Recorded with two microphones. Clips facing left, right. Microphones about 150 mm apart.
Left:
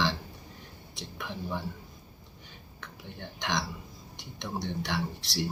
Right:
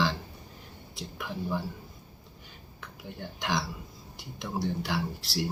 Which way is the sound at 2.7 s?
5° right (ahead or behind).